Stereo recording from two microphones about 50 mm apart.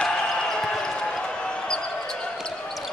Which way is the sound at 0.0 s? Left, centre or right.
Centre.